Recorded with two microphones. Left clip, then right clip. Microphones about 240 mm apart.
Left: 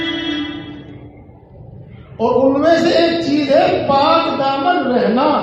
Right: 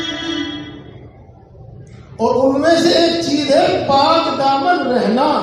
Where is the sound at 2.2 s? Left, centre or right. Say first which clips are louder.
Left 1 dB; right.